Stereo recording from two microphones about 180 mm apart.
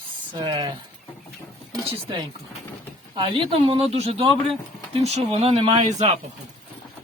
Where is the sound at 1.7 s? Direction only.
20° right (ahead or behind); by 6.1 s 40° right (ahead or behind).